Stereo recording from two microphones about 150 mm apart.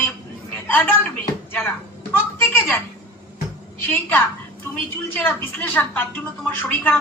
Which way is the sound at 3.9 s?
15° left (ahead or behind).